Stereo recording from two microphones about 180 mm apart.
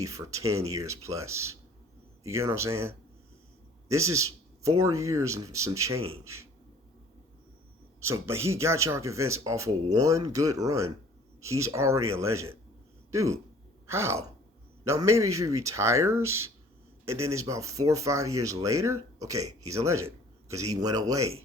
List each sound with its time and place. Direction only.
0.0 s speech: 20° right (ahead or behind)
8.0 s speech: 15° right (ahead or behind)